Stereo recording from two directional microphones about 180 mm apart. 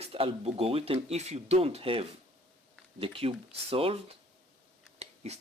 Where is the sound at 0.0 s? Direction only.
35° right (ahead or behind).